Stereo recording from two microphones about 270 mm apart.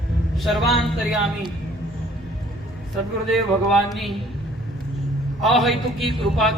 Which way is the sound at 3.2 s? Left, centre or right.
Centre.